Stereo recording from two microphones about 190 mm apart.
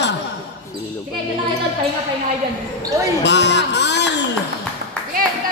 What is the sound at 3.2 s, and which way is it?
Speech, 65° left (ahead or behind).